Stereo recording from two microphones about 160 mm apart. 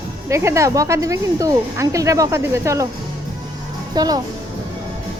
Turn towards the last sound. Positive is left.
turn(degrees=-25)  # may be behind; listen again after turning